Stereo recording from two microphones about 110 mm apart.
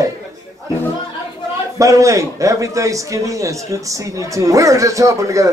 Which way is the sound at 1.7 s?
30° right (ahead or behind).